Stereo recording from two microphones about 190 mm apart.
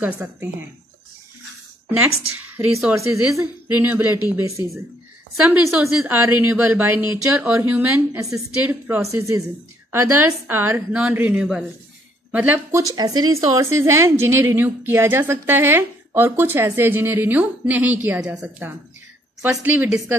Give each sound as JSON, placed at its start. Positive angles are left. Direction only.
{"t": 0.0, "sound": "a woman's voice", "side_deg": -10}
{"t": 2.0, "sound": "a woman's voice", "side_deg": -90}
{"t": 2.4, "sound": "a woman's voice", "side_deg": -10}
{"t": 6.4, "sound": "a woman's voice", "side_deg": -10}
{"t": 12.8, "sound": "a woman's voice", "side_deg": -20}